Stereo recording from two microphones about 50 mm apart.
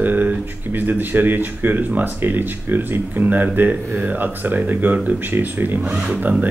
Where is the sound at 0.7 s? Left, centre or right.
Right.